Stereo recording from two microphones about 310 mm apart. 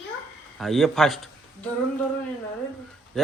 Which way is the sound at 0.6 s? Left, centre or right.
Centre.